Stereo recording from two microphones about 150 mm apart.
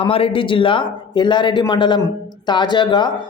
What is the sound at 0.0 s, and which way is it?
A man's voice, 40° left (ahead or behind).